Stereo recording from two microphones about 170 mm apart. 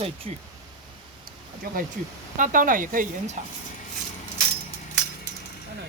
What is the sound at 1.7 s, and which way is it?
Speech, 55° right (ahead or behind).